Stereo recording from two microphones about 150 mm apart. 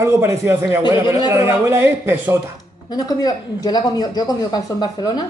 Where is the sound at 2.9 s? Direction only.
25° left (ahead or behind).